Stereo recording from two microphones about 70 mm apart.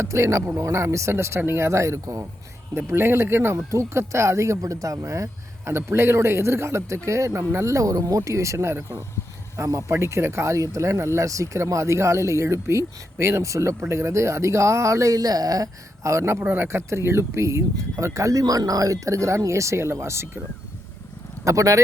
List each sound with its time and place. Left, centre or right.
0.0 s speech: right
16.4 s speech: right
21.4 s speech: right